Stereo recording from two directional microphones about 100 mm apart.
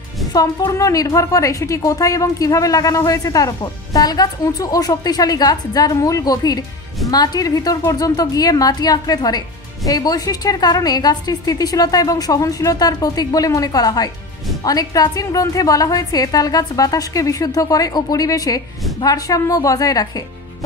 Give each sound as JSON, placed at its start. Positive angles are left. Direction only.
{"t": 0.3, "sound": "a woman's voice", "side_deg": 40}